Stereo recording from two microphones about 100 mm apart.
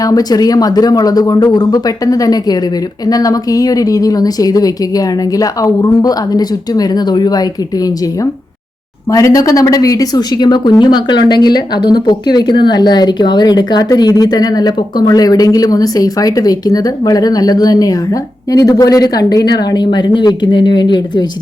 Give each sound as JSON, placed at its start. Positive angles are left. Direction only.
{"t": 0.0, "sound": "a woman's voice", "side_deg": 40}
{"t": 9.0, "sound": "a woman's voice", "side_deg": 35}